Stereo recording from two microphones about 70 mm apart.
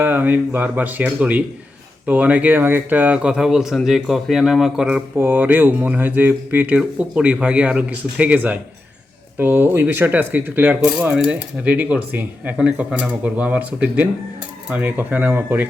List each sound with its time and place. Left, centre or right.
0.0 s speech: right; by 5.0 s centre
5.1 s speech: right